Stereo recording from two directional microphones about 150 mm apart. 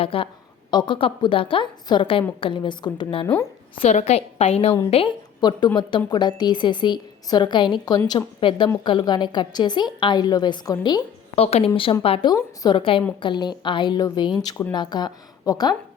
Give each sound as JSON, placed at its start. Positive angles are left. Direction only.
{"t": 0.0, "sound": "a woman's voice", "side_deg": 35}
{"t": 3.8, "sound": "a woman's voice", "side_deg": 45}
{"t": 5.4, "sound": "a woman's voice", "side_deg": 30}
{"t": 11.3, "sound": "a woman's voice", "side_deg": 40}